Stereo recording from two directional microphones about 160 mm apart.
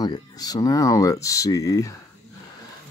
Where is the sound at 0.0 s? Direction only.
25° left (ahead or behind).